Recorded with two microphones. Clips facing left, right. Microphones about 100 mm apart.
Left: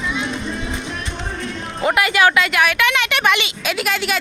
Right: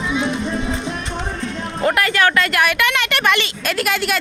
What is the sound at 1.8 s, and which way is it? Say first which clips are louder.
Speech: left 1 dB; 5° left (ahead or behind).